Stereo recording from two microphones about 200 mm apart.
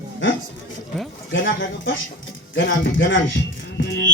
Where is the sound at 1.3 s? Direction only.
65° left (ahead or behind).